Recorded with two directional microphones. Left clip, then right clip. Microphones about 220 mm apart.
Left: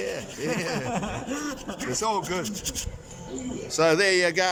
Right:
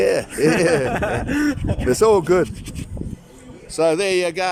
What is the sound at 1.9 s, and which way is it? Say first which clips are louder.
Speech: right 12 dB; 55° right (ahead or behind).